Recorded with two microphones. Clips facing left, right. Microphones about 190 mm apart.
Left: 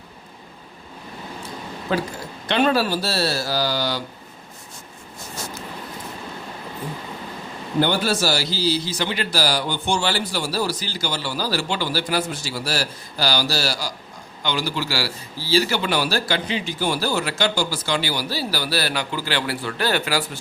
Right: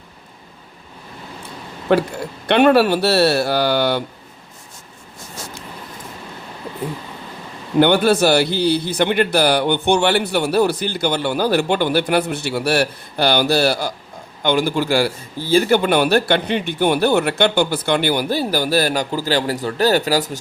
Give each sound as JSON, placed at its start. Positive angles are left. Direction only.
{"t": 1.9, "sound": "a man's voice", "side_deg": -70}
{"t": 7.8, "sound": "a man's voice", "side_deg": -60}